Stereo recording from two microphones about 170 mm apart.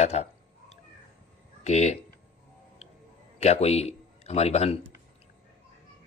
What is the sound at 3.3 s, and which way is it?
A man's voice, 40° left (ahead or behind).